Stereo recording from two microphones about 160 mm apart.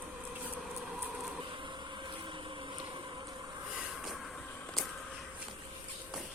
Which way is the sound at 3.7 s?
5° right (ahead or behind).